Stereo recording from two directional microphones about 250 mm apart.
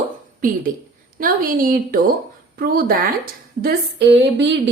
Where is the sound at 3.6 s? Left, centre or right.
Right.